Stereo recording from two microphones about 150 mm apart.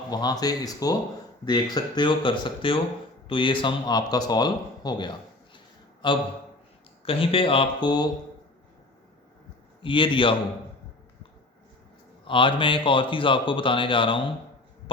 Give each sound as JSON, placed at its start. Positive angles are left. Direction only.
{"t": 0.1, "sound": "a man's voice", "side_deg": 25}
{"t": 9.8, "sound": "speech", "side_deg": 35}
{"t": 12.2, "sound": "speech", "side_deg": 35}